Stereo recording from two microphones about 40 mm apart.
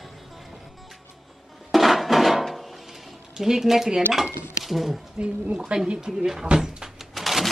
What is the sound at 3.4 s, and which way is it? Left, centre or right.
Speech, centre.